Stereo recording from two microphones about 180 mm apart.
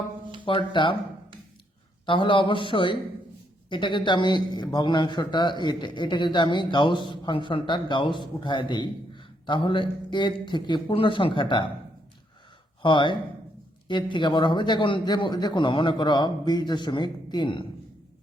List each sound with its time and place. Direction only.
0.4 s speech: 25° left (ahead or behind)
2.0 s speech: 30° left (ahead or behind)
12.8 s speech: 25° left (ahead or behind)